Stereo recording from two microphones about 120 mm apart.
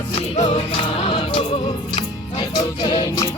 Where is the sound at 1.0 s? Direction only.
50° left (ahead or behind).